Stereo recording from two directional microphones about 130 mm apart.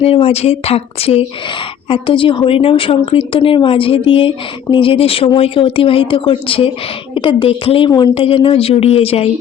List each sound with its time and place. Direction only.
0.0 s a woman's voice: 50° left (ahead or behind)
7.9 s speech: 35° left (ahead or behind)
8.1 s a woman's voice: 45° left (ahead or behind)